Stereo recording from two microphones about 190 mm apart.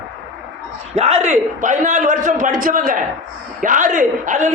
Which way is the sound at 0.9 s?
35° right (ahead or behind).